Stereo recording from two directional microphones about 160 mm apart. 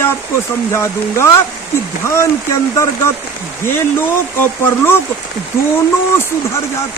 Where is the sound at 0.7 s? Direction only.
15° left (ahead or behind).